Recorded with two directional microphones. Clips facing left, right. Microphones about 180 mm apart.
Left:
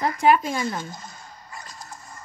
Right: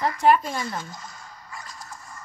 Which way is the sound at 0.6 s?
25° left (ahead or behind).